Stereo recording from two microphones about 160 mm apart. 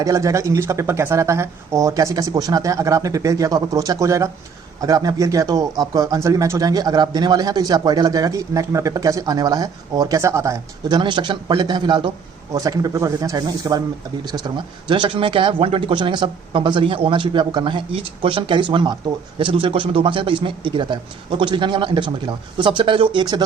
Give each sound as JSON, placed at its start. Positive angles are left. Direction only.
{"t": 0.0, "sound": "speech", "side_deg": -20}